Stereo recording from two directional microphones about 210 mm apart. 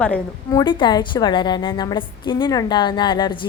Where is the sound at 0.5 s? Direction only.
20° left (ahead or behind).